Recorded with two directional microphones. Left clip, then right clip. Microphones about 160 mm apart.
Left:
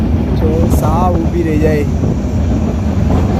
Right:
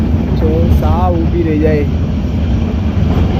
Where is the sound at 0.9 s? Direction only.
5° left (ahead or behind).